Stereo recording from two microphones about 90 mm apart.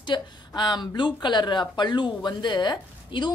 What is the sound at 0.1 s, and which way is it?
Speech, 50° left (ahead or behind).